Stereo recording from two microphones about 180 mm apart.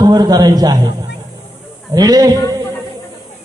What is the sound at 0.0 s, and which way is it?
A man's voice, 20° right (ahead or behind).